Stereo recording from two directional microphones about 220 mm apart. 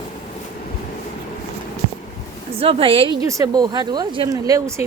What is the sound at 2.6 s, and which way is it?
Speech, 25° right (ahead or behind).